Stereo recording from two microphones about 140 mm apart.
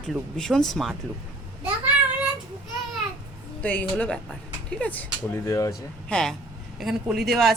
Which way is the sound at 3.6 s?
10° left (ahead or behind).